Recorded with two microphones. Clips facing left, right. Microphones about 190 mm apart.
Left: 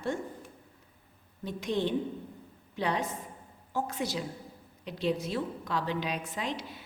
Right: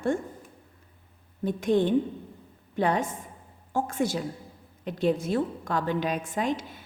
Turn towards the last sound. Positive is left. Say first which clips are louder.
# right 7 dB
turn(degrees=-50)  # may be behind; listen again after turning